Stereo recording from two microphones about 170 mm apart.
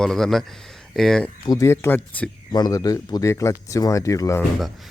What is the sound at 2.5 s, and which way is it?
Speech, 25° left (ahead or behind).